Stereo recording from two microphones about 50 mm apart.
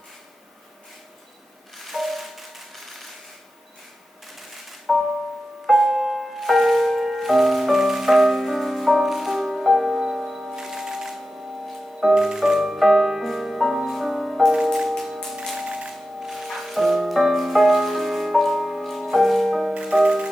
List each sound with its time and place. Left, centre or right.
1.8 s music: centre
4.4 s music: centre
14.5 s music: centre
14.8 s music: centre
15.5 s music: centre
19.7 s music: centre